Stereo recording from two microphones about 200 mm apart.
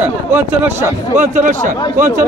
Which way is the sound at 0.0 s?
10° right (ahead or behind).